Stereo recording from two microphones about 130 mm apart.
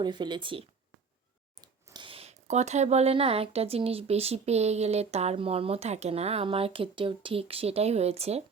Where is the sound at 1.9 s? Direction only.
45° right (ahead or behind).